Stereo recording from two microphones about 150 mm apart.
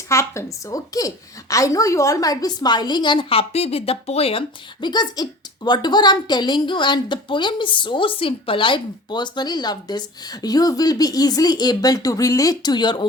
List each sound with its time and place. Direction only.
0.1 s speech: 20° left (ahead or behind)